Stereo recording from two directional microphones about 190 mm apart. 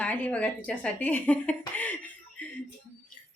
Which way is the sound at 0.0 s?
10° left (ahead or behind).